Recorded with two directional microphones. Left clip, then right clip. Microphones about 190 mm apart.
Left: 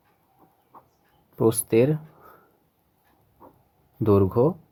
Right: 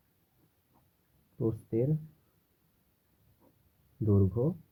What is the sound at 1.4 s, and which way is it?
Speech, 45° left (ahead or behind).